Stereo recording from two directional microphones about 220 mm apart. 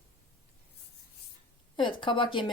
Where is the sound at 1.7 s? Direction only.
20° left (ahead or behind).